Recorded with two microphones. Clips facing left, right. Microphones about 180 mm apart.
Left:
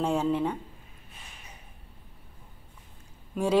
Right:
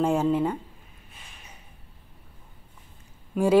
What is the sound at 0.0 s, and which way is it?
Speech, 5° right (ahead or behind).